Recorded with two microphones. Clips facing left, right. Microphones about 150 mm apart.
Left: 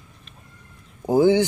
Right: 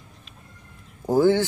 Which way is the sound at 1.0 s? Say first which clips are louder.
Left 2 dB; 15° left (ahead or behind).